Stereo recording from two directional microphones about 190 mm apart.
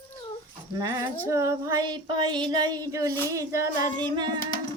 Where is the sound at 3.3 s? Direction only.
15° right (ahead or behind).